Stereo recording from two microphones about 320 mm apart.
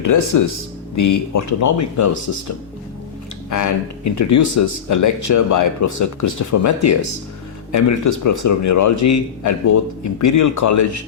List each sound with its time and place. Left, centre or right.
0.0 s speech: left
3.5 s speech: left